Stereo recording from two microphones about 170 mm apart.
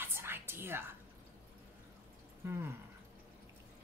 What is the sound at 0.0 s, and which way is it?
Whispering, 15° right (ahead or behind).